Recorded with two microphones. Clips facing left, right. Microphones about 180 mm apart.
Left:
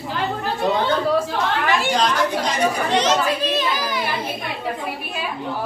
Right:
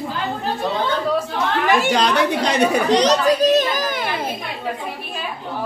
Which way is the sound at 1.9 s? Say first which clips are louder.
Right 2 dB; 65° right (ahead or behind).